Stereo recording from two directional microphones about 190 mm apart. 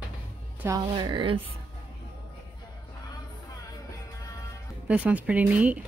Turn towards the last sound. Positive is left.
turn(degrees=-10)  # may be behind; listen again after turning